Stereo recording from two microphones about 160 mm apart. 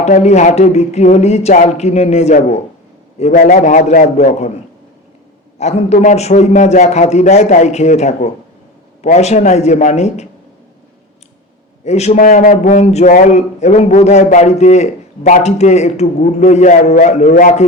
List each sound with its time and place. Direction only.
0.0 s a man's voice: 45° left (ahead or behind)
3.3 s a man's voice: 55° left (ahead or behind)
5.5 s a man's voice: 45° left (ahead or behind)
11.9 s a man's voice: 45° left (ahead or behind)